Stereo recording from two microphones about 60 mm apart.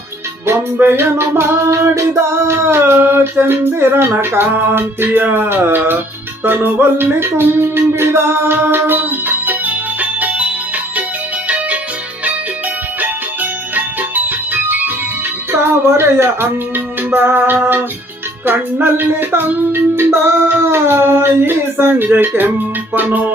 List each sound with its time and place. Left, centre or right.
0.4 s music: right
13.0 s music: right
16.0 s music: right